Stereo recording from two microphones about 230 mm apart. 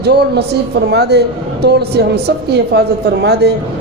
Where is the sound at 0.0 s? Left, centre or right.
Right.